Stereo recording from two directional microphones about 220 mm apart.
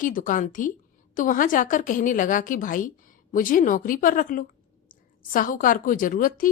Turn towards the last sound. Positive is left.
turn(degrees=40)  # may be behind; listen again after turning